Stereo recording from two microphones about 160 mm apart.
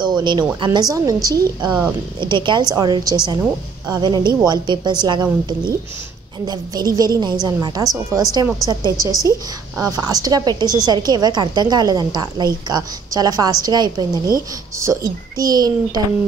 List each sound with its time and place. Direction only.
0.0 s a sound: 30° right (ahead or behind)
0.7 s a woman's voice: 20° right (ahead or behind)
1.7 s speech: 10° right (ahead or behind)
2.1 s a woman's voice: 30° right (ahead or behind)